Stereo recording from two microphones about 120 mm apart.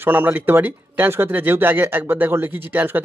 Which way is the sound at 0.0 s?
15° right (ahead or behind).